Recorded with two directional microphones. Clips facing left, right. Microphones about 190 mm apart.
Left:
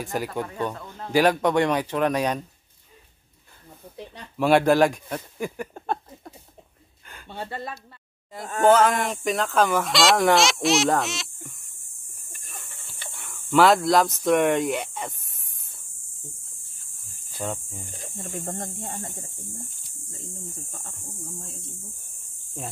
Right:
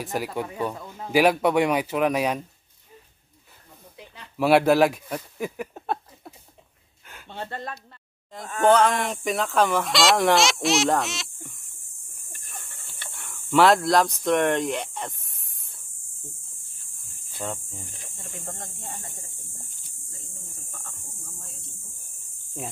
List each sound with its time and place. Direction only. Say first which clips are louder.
0.0 s speech: even; 5° right (ahead or behind)
3.9 s a sound: left 6 dB; 35° left (ahead or behind)
4.4 s speech: even; 5° right (ahead or behind)
13.1 s a sound: left 1 dB; centre (ahead or behind)
17.4 s speech: left 2 dB; 5° left (ahead or behind)
18.1 s speech: left 8 dB; 50° left (ahead or behind)